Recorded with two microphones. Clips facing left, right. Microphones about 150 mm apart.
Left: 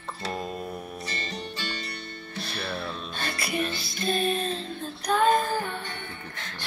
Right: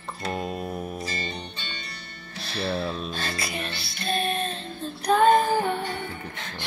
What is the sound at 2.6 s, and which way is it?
Speech, 30° right (ahead or behind).